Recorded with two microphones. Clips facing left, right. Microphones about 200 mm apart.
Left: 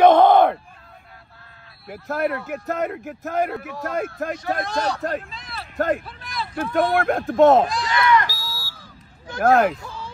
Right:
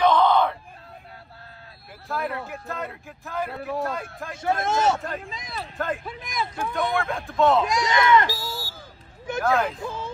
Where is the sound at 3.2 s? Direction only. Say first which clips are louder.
Left 5 dB; 55° left (ahead or behind).